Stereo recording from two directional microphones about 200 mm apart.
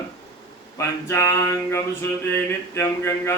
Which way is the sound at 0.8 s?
15° left (ahead or behind).